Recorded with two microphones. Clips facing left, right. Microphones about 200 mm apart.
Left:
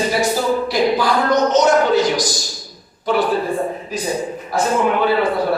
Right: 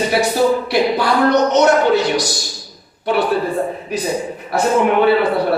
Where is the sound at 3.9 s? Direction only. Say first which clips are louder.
Right 1 dB; 65° right (ahead or behind).